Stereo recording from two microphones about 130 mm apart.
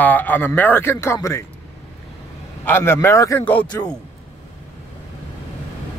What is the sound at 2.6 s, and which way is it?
A man's voice, 15° left (ahead or behind).